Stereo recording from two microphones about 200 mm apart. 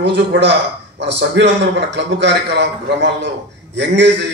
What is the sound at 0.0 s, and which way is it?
A man's voice, 60° right (ahead or behind).